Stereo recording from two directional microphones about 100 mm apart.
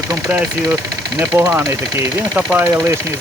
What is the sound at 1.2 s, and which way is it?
Speech, 15° right (ahead or behind).